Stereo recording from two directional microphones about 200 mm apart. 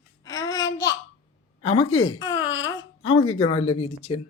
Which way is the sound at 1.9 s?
90° left.